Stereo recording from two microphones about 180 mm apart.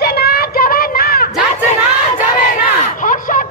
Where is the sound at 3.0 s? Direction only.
45° left (ahead or behind).